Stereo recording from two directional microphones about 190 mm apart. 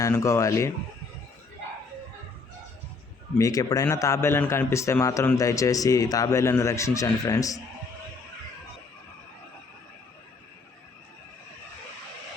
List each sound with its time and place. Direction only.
0.0 s a man's voice: 15° left (ahead or behind)
3.3 s a man's voice: 20° left (ahead or behind)